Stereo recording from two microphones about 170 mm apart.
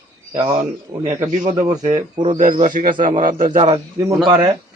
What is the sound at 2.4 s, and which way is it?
Speech, 50° right (ahead or behind).